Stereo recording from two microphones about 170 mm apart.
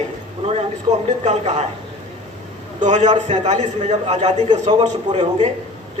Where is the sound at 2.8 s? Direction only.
40° right (ahead or behind).